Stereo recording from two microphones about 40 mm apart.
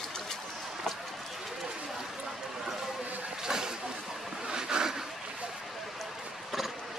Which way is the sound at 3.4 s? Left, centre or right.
Centre.